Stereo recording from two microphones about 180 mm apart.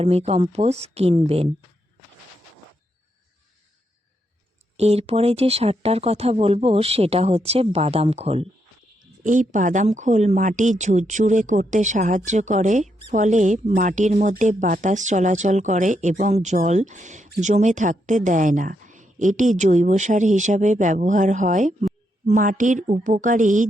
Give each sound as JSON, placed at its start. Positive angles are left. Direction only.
{"t": 0.0, "sound": "speech", "side_deg": -35}
{"t": 4.8, "sound": "speech", "side_deg": -35}
{"t": 9.2, "sound": "speech", "side_deg": -45}